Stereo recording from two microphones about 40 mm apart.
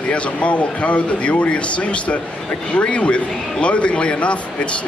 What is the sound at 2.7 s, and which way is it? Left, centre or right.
Speech, left.